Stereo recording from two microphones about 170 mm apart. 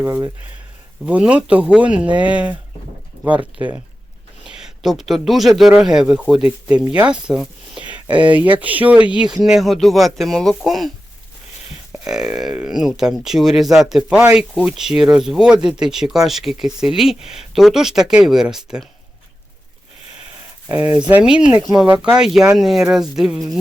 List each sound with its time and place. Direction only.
0.0 s speech: 15° right (ahead or behind)
20.7 s speech: 15° right (ahead or behind); by 23.6 s centre (ahead or behind)